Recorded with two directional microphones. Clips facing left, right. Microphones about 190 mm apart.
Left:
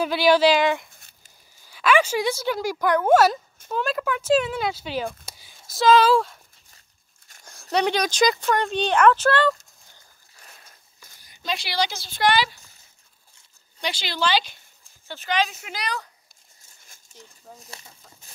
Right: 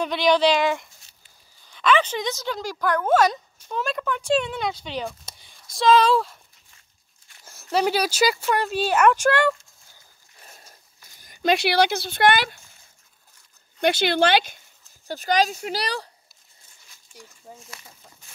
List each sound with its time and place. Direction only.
0.0 s speech: 5° left (ahead or behind)
0.8 s a sound: 55° left (ahead or behind)
1.6 s speech: 5° left (ahead or behind)
7.7 s speech: 5° right (ahead or behind)
10.4 s a sound: 35° right (ahead or behind)
11.4 s speech: 65° right (ahead or behind)
13.7 s speech: 55° right (ahead or behind)
15.0 s speech: 40° right (ahead or behind)
17.1 s a sound: 10° right (ahead or behind)
17.6 s speech: 30° left (ahead or behind)